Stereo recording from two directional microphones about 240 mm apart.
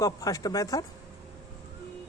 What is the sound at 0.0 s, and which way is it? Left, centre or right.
Speech, centre.